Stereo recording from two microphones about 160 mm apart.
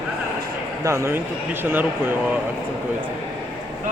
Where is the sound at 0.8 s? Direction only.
20° right (ahead or behind).